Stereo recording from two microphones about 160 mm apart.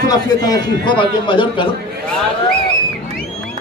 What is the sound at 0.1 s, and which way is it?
Speech, 25° left (ahead or behind).